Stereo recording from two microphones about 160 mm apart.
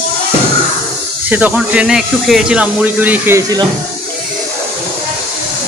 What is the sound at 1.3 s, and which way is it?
Speech, 10° right (ahead or behind).